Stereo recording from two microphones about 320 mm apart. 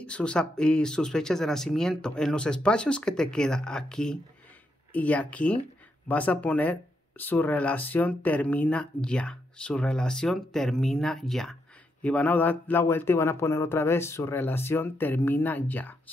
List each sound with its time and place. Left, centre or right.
0.0 s speech: centre